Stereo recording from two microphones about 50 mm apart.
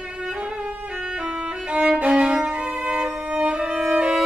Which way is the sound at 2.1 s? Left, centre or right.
Centre.